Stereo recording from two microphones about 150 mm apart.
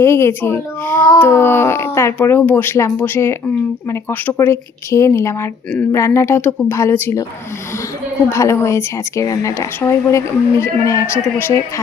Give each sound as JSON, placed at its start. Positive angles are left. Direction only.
{"t": 0.0, "sound": "speech", "side_deg": 15}
{"t": 8.3, "sound": "a woman's voice", "side_deg": 15}